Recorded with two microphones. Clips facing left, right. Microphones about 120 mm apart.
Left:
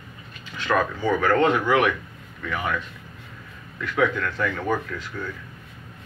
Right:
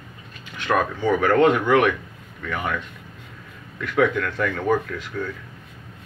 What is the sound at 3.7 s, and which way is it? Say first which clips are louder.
Speech: right 3 dB; 60° right (ahead or behind).